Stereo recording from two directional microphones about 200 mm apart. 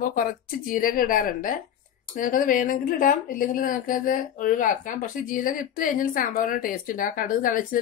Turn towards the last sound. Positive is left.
turn(degrees=45)  # may be behind; listen again after turning